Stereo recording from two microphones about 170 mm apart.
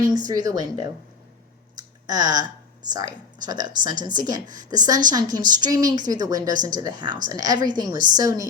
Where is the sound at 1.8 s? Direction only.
25° right (ahead or behind).